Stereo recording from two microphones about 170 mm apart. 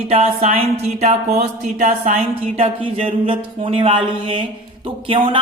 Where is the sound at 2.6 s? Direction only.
35° right (ahead or behind).